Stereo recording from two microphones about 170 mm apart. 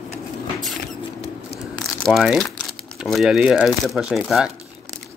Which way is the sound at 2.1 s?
Centre (ahead or behind).